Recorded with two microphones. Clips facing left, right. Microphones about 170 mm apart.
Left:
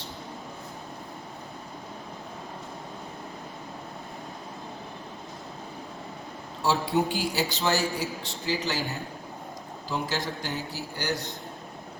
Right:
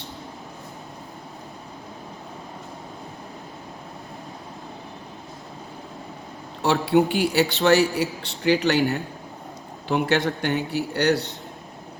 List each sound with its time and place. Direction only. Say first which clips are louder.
6.6 s a man's voice: right 6 dB; 65° right (ahead or behind)